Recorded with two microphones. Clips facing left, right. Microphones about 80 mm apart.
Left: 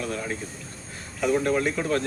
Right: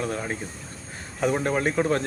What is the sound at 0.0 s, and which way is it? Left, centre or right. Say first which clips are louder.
Speech: right 1 dB; right.